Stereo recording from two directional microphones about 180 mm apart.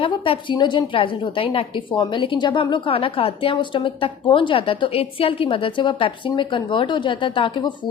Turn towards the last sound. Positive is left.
turn(degrees=25)  # may be behind; listen again after turning